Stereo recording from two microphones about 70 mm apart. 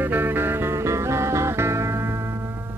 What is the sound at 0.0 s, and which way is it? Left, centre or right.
Music, right.